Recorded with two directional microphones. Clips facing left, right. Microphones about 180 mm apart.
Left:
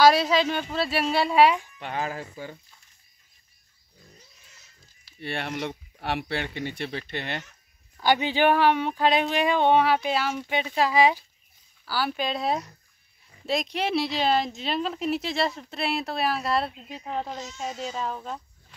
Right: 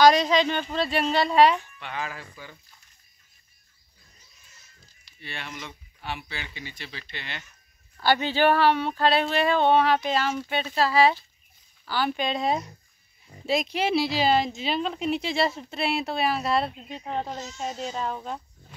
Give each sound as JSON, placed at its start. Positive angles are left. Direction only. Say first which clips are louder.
{"t": 0.0, "sound": "speech", "louder": "right 1 dB", "side_deg": 5}
{"t": 1.8, "sound": "speech", "louder": "left 4 dB", "side_deg": 45}
{"t": 5.2, "sound": "speech", "louder": "left 8 dB", "side_deg": 60}
{"t": 8.0, "sound": "speech", "louder": "even", "side_deg": 15}